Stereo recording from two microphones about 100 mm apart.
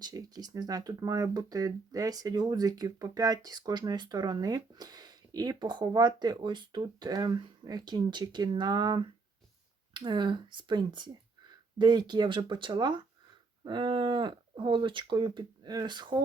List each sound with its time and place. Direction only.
0.0 s speech: 40° right (ahead or behind)